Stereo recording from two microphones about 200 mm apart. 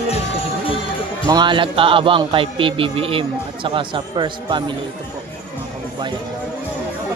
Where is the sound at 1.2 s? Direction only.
20° right (ahead or behind).